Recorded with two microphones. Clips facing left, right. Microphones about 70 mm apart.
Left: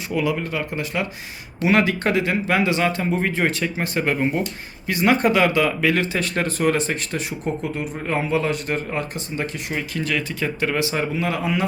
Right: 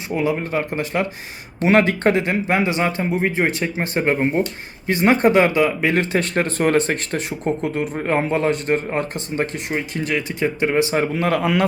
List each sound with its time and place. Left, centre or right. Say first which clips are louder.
0.1 s speech: right 2 dB; right
7.6 s speech: right 4 dB; right
10.9 s a man's voice: right 4 dB; right